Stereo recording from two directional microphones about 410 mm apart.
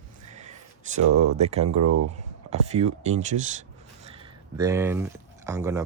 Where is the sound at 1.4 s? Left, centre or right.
Centre.